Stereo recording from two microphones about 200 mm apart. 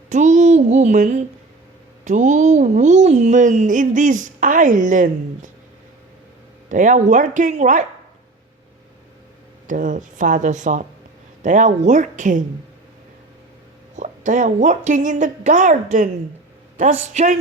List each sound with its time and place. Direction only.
0.1 s speech: 35° right (ahead or behind)
6.7 s speech: 40° right (ahead or behind)
9.6 s speech: 40° right (ahead or behind)
13.9 s speech: 40° right (ahead or behind)